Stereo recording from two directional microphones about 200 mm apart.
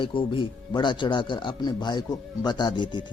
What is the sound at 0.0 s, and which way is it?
Speech, 25° left (ahead or behind).